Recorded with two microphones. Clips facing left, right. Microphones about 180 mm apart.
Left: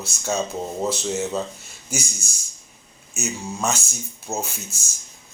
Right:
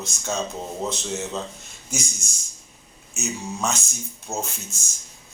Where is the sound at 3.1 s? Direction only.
5° left (ahead or behind).